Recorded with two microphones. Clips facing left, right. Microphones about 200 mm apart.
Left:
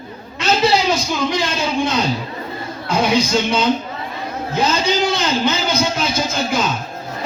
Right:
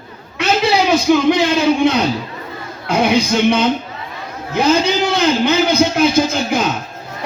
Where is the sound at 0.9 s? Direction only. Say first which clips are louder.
Right 7 dB; 60° right (ahead or behind).